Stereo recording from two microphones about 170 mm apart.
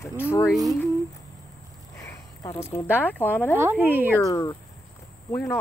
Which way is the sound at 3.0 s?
10° left (ahead or behind).